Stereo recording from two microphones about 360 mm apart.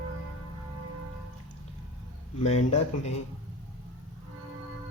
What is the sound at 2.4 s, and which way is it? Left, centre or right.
Speech, centre.